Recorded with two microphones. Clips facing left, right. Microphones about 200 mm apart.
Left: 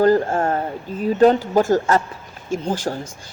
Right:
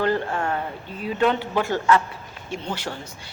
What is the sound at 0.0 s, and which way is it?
A woman's voice, 40° left (ahead or behind).